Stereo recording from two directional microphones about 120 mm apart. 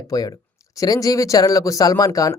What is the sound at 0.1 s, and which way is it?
Speech, 30° left (ahead or behind).